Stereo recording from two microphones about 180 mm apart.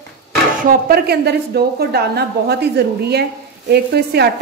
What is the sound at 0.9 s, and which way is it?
A woman's voice, 60° right (ahead or behind).